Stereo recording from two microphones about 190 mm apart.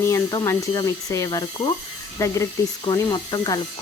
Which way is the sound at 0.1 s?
15° left (ahead or behind).